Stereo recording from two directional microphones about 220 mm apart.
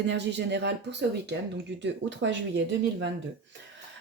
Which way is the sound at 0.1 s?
50° right (ahead or behind).